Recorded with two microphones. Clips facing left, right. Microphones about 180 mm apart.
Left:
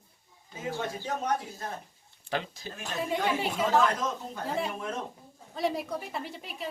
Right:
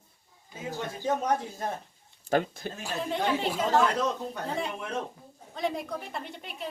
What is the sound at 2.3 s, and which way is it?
Speech, 50° right (ahead or behind).